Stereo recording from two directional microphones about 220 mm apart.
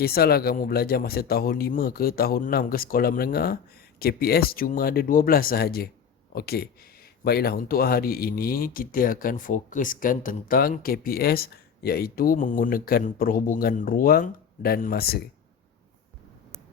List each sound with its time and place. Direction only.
0.0 s a man's voice: 45° left (ahead or behind)